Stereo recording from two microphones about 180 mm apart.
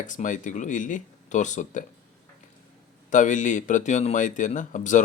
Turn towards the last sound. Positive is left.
turn(degrees=45)  # may be behind; listen again after turning